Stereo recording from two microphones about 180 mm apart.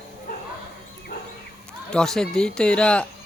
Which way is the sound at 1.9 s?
5° left (ahead or behind).